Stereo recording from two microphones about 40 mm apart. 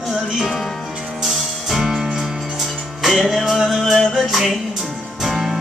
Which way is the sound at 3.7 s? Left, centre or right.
Centre.